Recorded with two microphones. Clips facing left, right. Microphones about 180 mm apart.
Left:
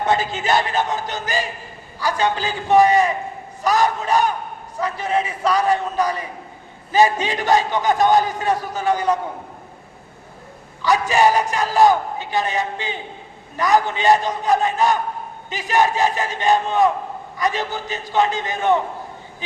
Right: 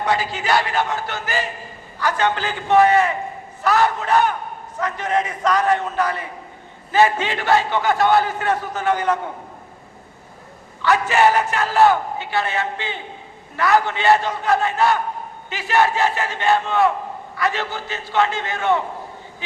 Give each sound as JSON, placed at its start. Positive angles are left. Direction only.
{"t": 0.4, "sound": "a man's voice", "side_deg": 20}
{"t": 10.8, "sound": "a man's voice", "side_deg": 15}